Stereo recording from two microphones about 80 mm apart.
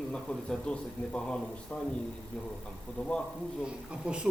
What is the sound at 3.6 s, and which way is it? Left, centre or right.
Speech, centre.